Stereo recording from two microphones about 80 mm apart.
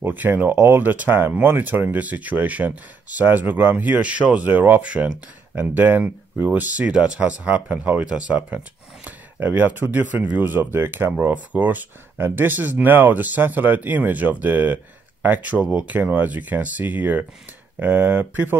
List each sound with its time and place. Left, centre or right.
0.0 s speech: right